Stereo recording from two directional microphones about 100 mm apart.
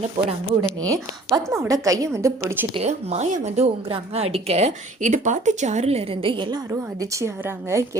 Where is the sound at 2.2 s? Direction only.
25° right (ahead or behind).